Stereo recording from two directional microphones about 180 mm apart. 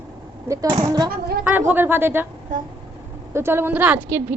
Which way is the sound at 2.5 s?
45° right (ahead or behind).